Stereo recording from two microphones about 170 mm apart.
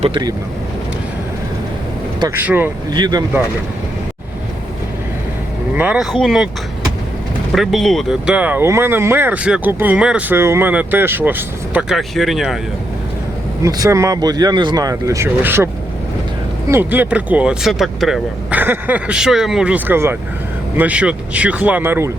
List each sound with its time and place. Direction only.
0.0 s speech: 25° right (ahead or behind)
2.2 s speech: 10° right (ahead or behind)
2.9 s speech: 25° right (ahead or behind)
5.7 s speech: 10° right (ahead or behind)
7.5 s speech: centre (ahead or behind)
13.6 s speech: 20° right (ahead or behind)